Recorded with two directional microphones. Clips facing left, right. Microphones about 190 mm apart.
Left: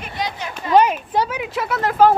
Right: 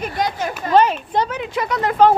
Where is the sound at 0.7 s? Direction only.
10° left (ahead or behind).